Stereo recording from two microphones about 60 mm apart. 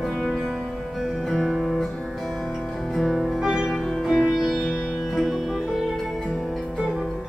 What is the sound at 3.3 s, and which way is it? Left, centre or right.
Music, centre.